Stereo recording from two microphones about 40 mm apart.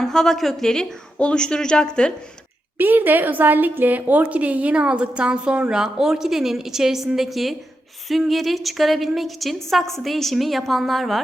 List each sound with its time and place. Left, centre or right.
0.0 s a woman's voice: centre
1.2 s speech: left
2.7 s a woman's voice: right; by 11.2 s centre